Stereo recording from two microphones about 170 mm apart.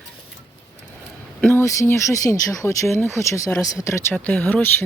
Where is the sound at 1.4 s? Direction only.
10° left (ahead or behind).